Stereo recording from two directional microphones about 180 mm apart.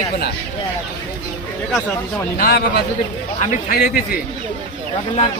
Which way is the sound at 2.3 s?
55° left (ahead or behind).